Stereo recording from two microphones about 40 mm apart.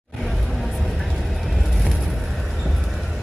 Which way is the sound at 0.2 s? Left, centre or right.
Centre.